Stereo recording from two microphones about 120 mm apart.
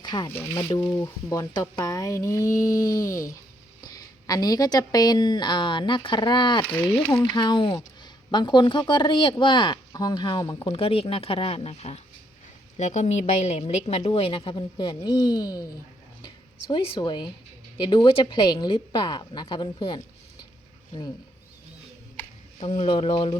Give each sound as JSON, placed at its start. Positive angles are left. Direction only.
{"t": 0.0, "sound": "music", "side_deg": 35}
{"t": 0.3, "sound": "speech", "side_deg": 20}
{"t": 0.5, "sound": "a woman's voice", "side_deg": 40}
{"t": 0.9, "sound": "a woman's voice", "side_deg": 30}
{"t": 10.7, "sound": "a woman's voice", "side_deg": 55}
{"t": 22.6, "sound": "a woman's voice", "side_deg": 55}